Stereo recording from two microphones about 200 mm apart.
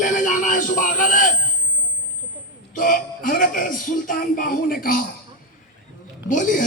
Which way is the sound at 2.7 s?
40° left (ahead or behind).